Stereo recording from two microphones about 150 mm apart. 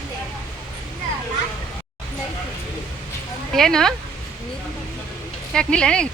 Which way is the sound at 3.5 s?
5° left (ahead or behind).